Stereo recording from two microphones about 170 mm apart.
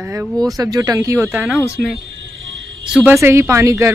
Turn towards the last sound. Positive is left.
turn(degrees=-15)  # may be behind; listen again after turning